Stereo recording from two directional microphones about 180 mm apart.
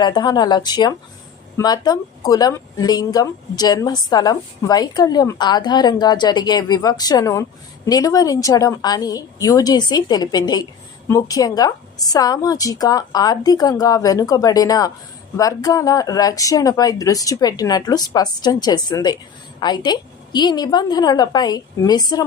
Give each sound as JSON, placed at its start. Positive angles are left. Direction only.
{"t": 0.0, "sound": "speech", "side_deg": 20}